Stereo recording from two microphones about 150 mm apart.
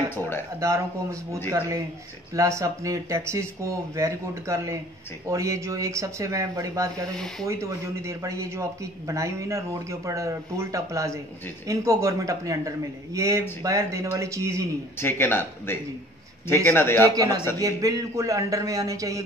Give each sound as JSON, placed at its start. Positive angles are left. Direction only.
{"t": 0.6, "sound": "a man's voice", "side_deg": -20}
{"t": 2.3, "sound": "a man's voice", "side_deg": -20}
{"t": 15.0, "sound": "speech", "side_deg": 15}
{"t": 17.1, "sound": "a man's voice", "side_deg": -25}